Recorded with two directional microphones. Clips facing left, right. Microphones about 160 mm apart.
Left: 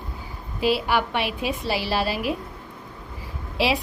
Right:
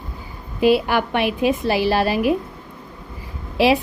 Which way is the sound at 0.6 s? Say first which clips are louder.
Right 6 dB; 50° right (ahead or behind).